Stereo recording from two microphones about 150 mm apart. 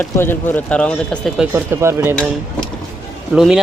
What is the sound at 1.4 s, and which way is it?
Speech, 15° right (ahead or behind).